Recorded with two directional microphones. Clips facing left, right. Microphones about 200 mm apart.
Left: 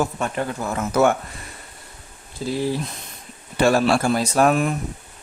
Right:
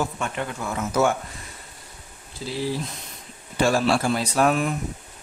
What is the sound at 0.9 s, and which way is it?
Speech, 60° left (ahead or behind).